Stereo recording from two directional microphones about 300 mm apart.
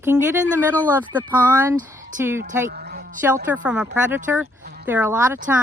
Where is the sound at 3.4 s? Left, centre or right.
Centre.